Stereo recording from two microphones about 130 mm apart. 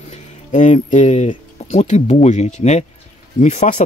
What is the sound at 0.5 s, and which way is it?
Speech, 70° left (ahead or behind).